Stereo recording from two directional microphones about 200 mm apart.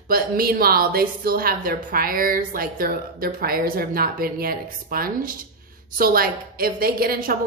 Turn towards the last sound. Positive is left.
turn(degrees=-45)  # may be behind; listen again after turning